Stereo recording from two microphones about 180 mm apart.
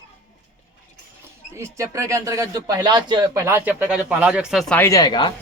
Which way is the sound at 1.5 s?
15° right (ahead or behind).